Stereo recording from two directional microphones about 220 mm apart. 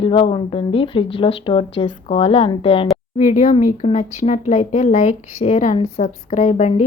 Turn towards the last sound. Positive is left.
turn(degrees=30)  # may be behind; listen again after turning